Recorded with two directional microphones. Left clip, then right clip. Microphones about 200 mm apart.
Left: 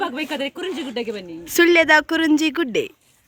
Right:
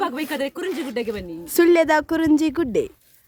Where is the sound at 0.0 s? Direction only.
5° left (ahead or behind).